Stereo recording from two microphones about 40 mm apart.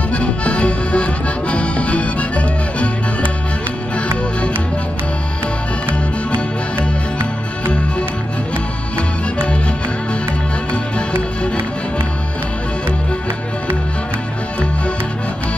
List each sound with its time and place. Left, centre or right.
0.1 s accordion: left
8.9 s music: left